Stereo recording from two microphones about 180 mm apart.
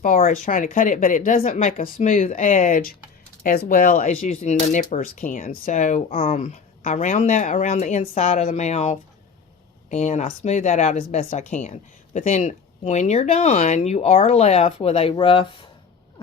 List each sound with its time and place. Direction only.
0.0 s a woman's voice: 50° left (ahead or behind); by 15.4 s 30° left (ahead or behind)